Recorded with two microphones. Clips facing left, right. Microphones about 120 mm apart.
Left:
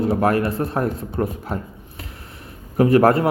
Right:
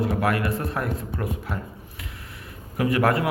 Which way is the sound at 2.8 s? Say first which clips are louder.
Left 7 dB; 35° left (ahead or behind).